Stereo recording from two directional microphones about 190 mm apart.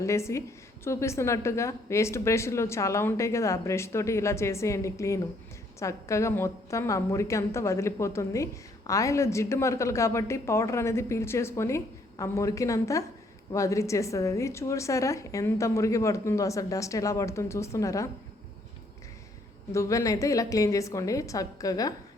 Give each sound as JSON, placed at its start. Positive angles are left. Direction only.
{"t": 0.0, "sound": "a woman's voice", "side_deg": 15}
{"t": 19.7, "sound": "a woman's voice", "side_deg": 15}